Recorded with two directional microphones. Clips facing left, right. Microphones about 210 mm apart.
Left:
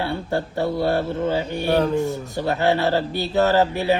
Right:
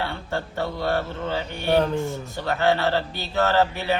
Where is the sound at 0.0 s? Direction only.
15° left (ahead or behind).